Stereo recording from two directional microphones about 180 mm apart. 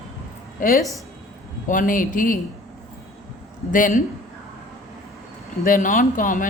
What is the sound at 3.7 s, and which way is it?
Speech, 45° left (ahead or behind).